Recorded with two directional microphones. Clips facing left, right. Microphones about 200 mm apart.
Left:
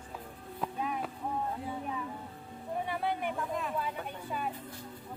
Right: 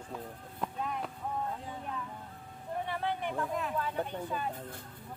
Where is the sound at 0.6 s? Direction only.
5° left (ahead or behind).